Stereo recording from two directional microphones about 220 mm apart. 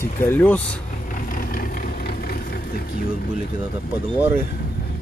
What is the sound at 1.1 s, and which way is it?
Vehicle, 40° left (ahead or behind).